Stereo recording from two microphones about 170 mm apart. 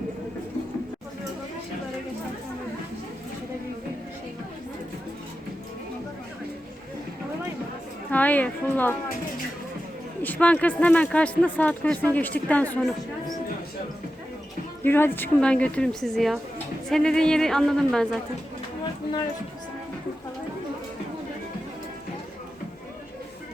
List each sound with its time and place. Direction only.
8.1 s speech: 10° left (ahead or behind)
10.2 s speech: 10° left (ahead or behind)
14.8 s speech: 15° left (ahead or behind)